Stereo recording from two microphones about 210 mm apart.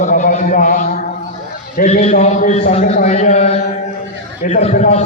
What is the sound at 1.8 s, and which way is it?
A man's voice, 30° left (ahead or behind).